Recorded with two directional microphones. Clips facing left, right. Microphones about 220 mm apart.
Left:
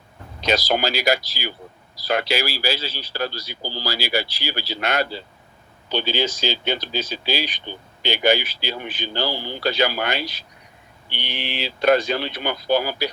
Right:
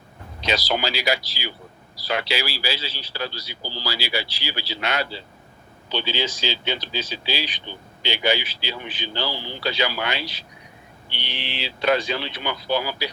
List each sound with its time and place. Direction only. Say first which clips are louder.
0.4 s speech: left 3 dB; 45° left (ahead or behind)